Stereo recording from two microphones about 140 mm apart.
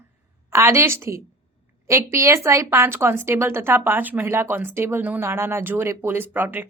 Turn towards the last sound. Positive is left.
turn(degrees=-15)  # may be behind; listen again after turning